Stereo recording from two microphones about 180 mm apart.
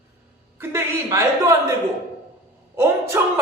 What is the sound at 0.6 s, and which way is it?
Speech, 15° right (ahead or behind).